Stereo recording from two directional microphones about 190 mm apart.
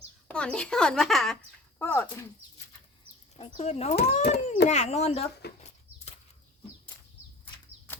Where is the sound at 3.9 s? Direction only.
60° left (ahead or behind).